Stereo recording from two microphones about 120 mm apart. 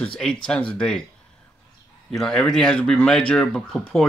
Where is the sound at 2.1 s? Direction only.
5° left (ahead or behind).